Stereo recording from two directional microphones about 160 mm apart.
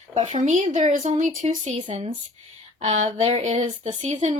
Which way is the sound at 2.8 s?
40° right (ahead or behind).